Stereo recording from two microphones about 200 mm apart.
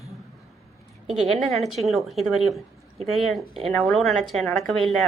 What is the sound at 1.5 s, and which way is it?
A woman's voice, centre (ahead or behind).